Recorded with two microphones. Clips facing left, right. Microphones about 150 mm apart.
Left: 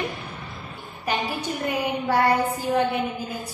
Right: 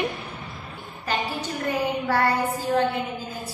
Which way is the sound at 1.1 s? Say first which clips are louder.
Left 1 dB; 15° left (ahead or behind).